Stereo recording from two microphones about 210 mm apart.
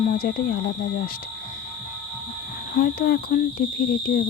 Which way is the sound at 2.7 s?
45° left (ahead or behind).